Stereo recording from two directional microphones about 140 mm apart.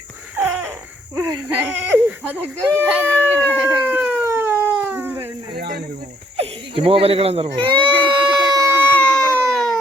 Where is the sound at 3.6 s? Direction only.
15° right (ahead or behind).